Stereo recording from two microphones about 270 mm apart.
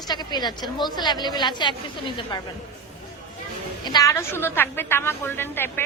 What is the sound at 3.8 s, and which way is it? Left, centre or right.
A woman's voice, centre.